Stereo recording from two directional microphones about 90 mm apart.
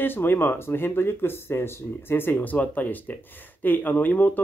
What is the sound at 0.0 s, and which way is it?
Speech, 25° left (ahead or behind).